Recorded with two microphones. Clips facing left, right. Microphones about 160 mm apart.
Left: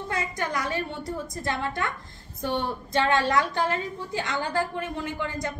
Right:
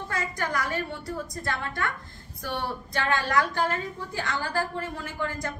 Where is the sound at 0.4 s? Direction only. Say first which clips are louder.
Right 1 dB; 20° left (ahead or behind).